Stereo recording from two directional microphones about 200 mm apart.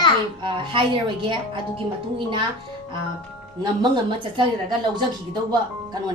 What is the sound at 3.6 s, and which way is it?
A woman's voice, 25° right (ahead or behind).